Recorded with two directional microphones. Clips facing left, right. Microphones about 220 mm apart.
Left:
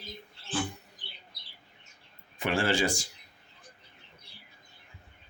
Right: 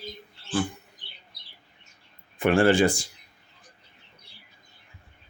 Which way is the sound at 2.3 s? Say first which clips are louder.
Right 8 dB; 55° right (ahead or behind).